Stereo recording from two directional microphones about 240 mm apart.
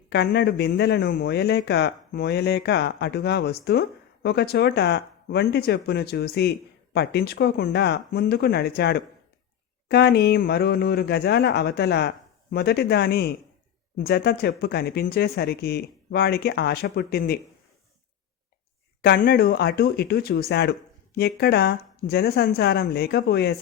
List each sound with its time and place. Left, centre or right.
0.1 s speech: left
19.0 s speech: left